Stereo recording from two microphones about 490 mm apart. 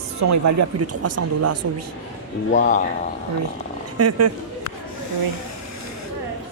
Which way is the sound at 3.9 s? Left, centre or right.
Right.